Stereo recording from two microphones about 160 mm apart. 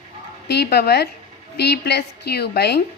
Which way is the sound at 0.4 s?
90° left.